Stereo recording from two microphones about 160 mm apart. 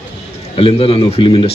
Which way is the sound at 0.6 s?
35° left (ahead or behind).